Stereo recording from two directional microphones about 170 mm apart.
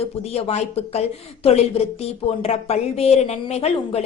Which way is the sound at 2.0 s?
35° left (ahead or behind).